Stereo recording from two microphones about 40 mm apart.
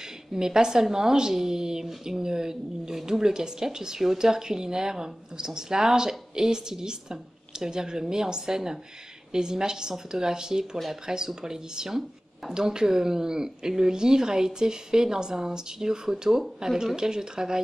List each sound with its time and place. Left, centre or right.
0.3 s speech: centre